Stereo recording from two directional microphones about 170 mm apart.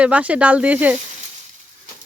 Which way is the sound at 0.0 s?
10° right (ahead or behind).